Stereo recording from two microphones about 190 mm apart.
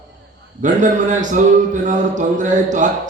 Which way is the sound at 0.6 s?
40° right (ahead or behind).